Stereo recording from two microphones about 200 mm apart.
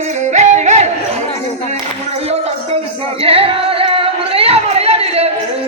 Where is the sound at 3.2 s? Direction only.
30° right (ahead or behind).